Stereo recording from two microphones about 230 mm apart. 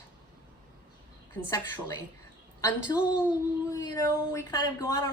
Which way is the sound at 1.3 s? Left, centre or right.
Centre.